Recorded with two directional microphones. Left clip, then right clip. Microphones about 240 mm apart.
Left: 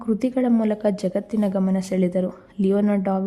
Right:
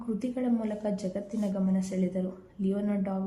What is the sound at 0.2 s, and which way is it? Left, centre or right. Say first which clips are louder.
A woman's voice: left 9 dB; left.